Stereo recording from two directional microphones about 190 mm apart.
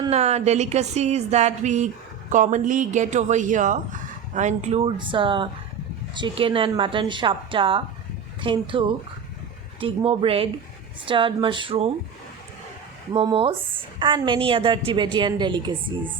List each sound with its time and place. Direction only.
0.1 s a woman's voice: 35° right (ahead or behind)
9.8 s a woman's voice: 30° right (ahead or behind)
13.1 s a woman's voice: 30° right (ahead or behind)